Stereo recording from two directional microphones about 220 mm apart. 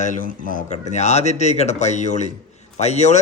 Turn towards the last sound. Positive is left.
turn(degrees=30)  # may be behind; listen again after turning